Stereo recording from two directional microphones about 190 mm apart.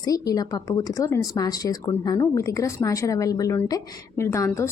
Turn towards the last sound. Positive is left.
turn(degrees=15)  # may be behind; listen again after turning